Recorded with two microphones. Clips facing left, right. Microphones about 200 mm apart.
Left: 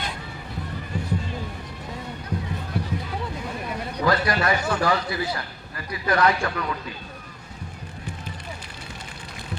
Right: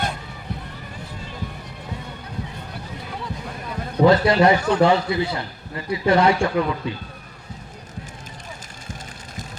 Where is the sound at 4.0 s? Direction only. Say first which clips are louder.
Right 8 dB; 25° right (ahead or behind).